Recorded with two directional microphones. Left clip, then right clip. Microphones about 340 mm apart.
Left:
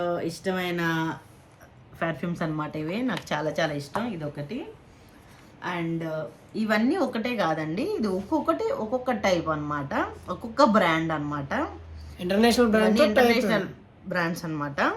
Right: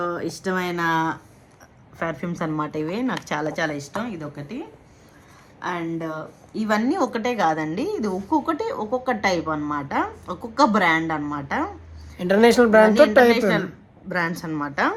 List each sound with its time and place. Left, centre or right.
0.0 s a woman's voice: centre
5.5 s a woman's voice: centre
12.1 s speech: right
14.1 s a woman's voice: centre